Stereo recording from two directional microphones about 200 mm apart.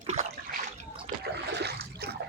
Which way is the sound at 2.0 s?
50° right (ahead or behind).